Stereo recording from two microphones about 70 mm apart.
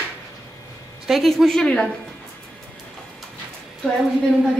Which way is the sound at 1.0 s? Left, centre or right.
Centre.